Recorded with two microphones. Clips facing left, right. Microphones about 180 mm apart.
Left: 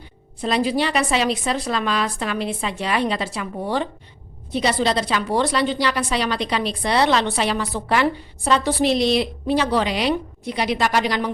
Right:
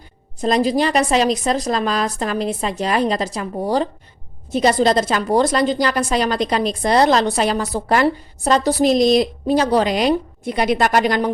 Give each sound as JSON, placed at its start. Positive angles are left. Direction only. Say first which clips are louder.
{"t": 0.4, "sound": "a woman's voice", "louder": "right 4 dB", "side_deg": -40}